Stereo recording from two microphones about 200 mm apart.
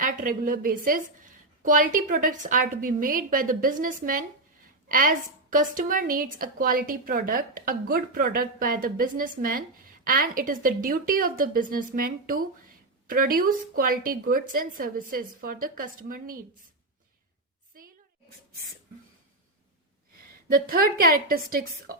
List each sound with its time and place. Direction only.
0.0 s a woman's voice: 45° right (ahead or behind)
20.5 s a woman's voice: 45° right (ahead or behind)